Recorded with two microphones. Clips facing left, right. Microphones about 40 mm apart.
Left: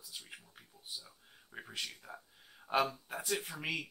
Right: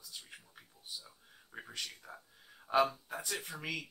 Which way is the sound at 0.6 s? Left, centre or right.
Centre.